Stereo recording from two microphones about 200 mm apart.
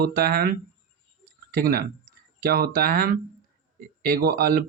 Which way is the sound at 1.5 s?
45° right (ahead or behind).